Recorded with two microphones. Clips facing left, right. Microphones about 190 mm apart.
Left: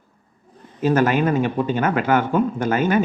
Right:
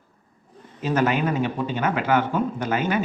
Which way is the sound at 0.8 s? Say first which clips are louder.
Left 4 dB; 45° left (ahead or behind).